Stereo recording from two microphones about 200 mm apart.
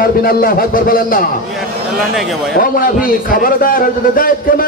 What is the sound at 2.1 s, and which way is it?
Speech, centre (ahead or behind).